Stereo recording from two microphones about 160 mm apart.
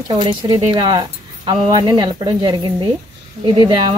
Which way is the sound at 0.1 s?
25° right (ahead or behind).